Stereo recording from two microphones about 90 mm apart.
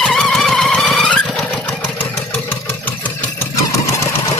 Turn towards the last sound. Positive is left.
turn(degrees=35)  # may be behind; listen again after turning